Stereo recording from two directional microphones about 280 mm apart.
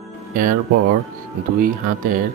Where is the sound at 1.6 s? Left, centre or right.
Right.